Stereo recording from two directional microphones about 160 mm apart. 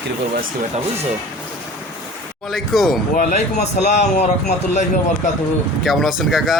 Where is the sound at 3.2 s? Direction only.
50° left (ahead or behind).